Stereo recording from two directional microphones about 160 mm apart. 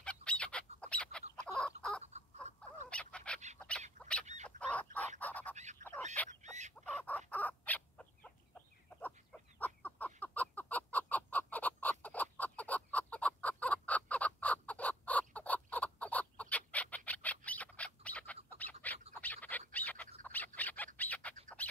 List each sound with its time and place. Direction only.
0.0 s fowl: 5° left (ahead or behind)
2.0 s dog: 45° right (ahead or behind)
2.9 s dog: 5° left (ahead or behind)
3.5 s bird: 5° left (ahead or behind)
4.5 s chicken: 10° left (ahead or behind)
5.2 s bird: 10° left (ahead or behind)
5.8 s fowl: 50° right (ahead or behind)
6.8 s chicken: 5° left (ahead or behind)
17.5 s a sound: 10° left (ahead or behind)
19.2 s bird: 10° left (ahead or behind)
19.7 s a sound: 10° left (ahead or behind)
20.2 s bird: 10° left (ahead or behind)